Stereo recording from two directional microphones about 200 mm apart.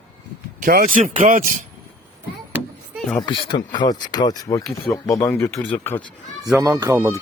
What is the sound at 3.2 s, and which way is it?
Speech, 25° left (ahead or behind).